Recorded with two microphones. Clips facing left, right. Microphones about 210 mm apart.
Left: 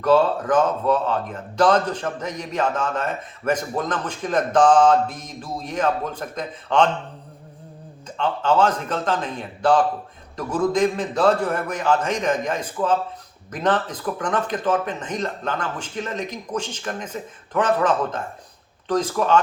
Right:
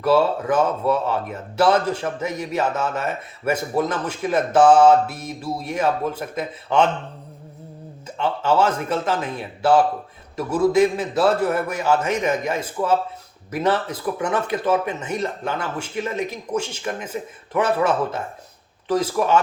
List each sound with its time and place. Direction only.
0.0 s speech: 10° right (ahead or behind)
8.2 s speech: 10° right (ahead or behind)